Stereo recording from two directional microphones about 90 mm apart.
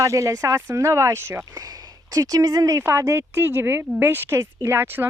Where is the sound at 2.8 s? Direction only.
30° right (ahead or behind).